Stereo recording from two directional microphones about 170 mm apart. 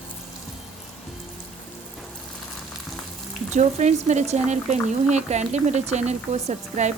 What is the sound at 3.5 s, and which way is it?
Speech, 45° right (ahead or behind).